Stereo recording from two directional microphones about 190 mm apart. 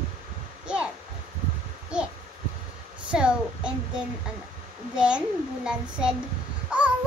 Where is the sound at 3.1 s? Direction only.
5° right (ahead or behind).